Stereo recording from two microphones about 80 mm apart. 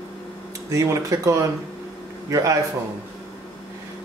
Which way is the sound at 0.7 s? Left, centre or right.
Right.